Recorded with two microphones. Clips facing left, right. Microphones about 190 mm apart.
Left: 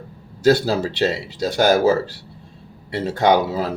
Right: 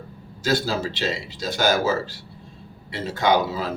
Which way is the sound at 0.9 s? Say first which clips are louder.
Left 6 dB; 65° left (ahead or behind).